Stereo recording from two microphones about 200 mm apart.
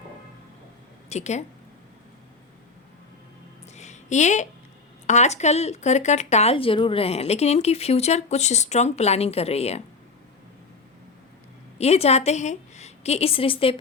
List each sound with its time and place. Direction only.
1.1 s speech: 35° left (ahead or behind)
3.8 s a sound: 35° left (ahead or behind)
5.0 s speech: 35° left (ahead or behind)
11.8 s speech: 30° left (ahead or behind)